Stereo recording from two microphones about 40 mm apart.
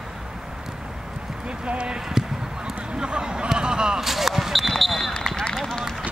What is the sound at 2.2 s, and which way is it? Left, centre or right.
Basketball bounce, centre.